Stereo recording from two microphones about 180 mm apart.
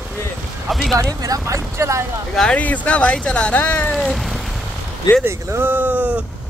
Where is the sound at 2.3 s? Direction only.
5° left (ahead or behind).